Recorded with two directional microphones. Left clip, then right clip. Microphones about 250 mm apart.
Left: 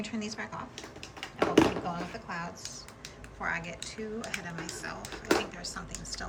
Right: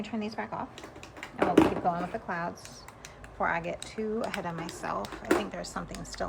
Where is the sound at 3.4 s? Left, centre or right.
Centre.